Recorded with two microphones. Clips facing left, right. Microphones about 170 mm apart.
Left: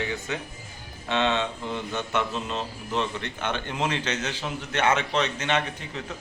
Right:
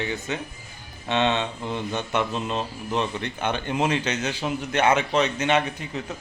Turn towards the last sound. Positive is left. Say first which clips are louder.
# right 4 dB
turn(degrees=-10)  # may be behind; listen again after turning